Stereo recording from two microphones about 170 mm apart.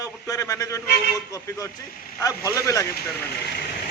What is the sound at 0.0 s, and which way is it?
A man's voice, 20° left (ahead or behind).